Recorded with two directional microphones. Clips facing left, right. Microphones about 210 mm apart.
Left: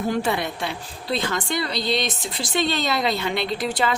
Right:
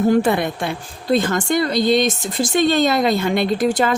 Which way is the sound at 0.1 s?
50° right (ahead or behind).